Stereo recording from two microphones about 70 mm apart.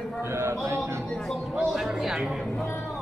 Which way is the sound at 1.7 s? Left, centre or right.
Centre.